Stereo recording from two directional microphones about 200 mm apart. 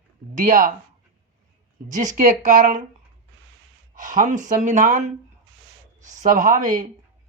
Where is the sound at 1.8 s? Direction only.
40° right (ahead or behind).